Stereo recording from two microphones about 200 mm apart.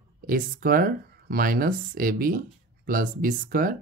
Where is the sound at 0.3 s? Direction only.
45° right (ahead or behind).